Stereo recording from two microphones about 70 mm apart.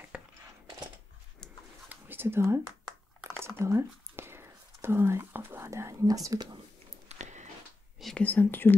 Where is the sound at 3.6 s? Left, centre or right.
Right.